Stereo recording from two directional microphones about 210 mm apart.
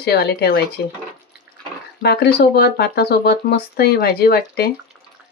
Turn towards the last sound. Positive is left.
turn(degrees=45)  # may be behind; listen again after turning